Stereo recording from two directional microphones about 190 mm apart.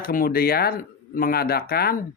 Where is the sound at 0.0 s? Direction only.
50° left (ahead or behind).